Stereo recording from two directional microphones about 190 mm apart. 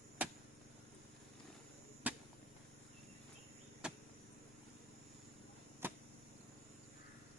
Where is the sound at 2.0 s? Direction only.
10° right (ahead or behind).